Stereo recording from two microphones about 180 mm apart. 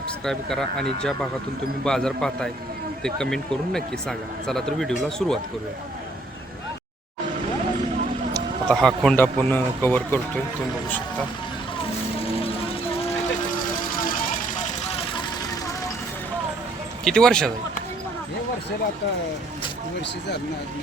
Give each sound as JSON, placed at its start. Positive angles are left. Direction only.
{"t": 0.3, "sound": "a man's voice", "side_deg": 5}
{"t": 8.7, "sound": "a man's voice", "side_deg": 5}
{"t": 12.4, "sound": "a sound", "side_deg": 30}
{"t": 14.3, "sound": "vehicle", "side_deg": 45}
{"t": 17.0, "sound": "a man's voice", "side_deg": 5}